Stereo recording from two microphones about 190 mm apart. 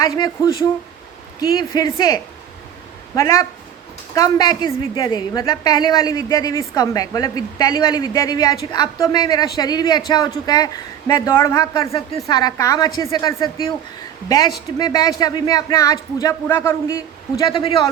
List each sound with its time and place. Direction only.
0.0 s a woman's voice: 20° left (ahead or behind)